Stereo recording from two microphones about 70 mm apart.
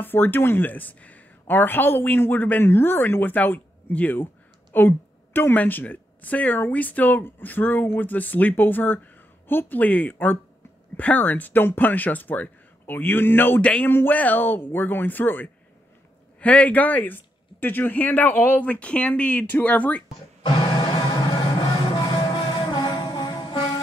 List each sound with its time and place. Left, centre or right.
0.0 s speech: left
13.6 s speech: centre
21.5 s music: left